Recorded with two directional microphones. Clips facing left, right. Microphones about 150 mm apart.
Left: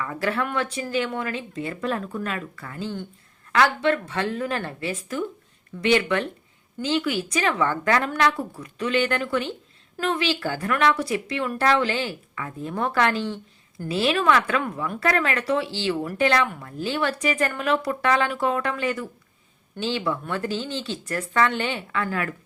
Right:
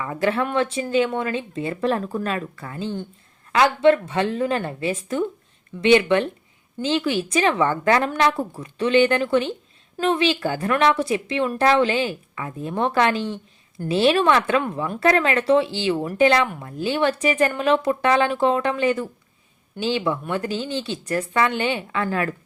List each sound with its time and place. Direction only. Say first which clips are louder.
0.0 s speech: right 4 dB; 20° right (ahead or behind)